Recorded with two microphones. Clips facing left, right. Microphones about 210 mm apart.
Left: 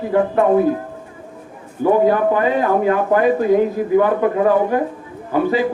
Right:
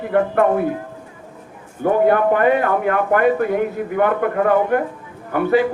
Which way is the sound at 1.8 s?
60° right (ahead or behind).